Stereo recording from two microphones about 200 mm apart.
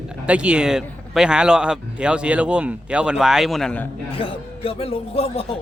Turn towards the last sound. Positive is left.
turn(degrees=30)  # may be behind; listen again after turning